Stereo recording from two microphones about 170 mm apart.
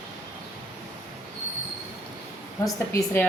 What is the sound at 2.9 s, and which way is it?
Speech, 15° left (ahead or behind).